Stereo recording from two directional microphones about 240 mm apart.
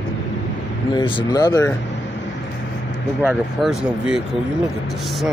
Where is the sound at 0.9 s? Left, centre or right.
Centre.